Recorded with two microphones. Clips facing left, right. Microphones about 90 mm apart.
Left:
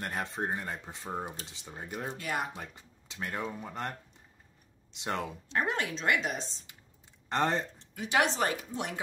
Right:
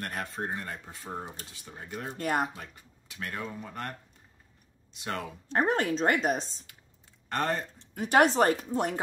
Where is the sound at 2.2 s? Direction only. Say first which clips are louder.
Right 7 dB; 40° right (ahead or behind).